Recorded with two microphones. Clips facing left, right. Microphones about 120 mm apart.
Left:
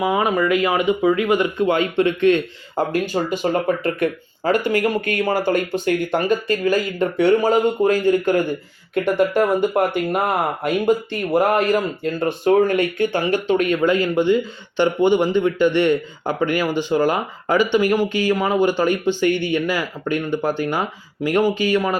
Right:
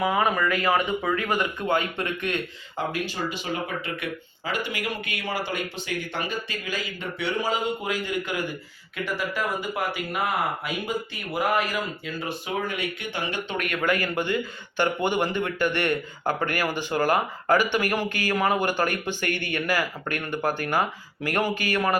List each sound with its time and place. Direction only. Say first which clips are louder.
0.0 s speech: left 5 dB; 20° left (ahead or behind)
2.7 s speech: left 9 dB; 45° left (ahead or behind); by 21.9 s 15° left (ahead or behind)